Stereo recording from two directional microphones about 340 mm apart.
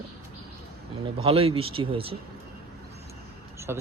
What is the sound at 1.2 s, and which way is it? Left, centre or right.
Speech, centre.